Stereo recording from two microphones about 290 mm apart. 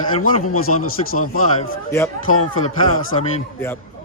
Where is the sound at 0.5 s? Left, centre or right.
Left.